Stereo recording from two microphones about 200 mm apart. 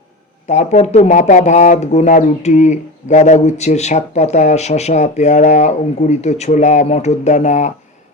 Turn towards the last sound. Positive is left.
turn(degrees=35)  # may be behind; listen again after turning